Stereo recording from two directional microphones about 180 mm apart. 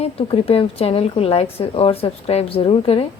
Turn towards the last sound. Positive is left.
turn(degrees=30)  # may be behind; listen again after turning